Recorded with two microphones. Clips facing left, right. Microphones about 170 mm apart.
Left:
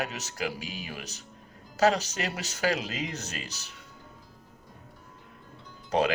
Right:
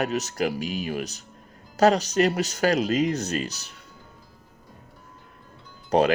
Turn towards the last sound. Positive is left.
turn(degrees=-40)  # may be behind; listen again after turning